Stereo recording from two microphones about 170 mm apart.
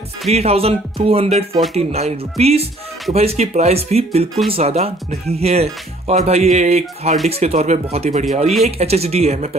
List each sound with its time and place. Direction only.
0.3 s speech: 35° right (ahead or behind)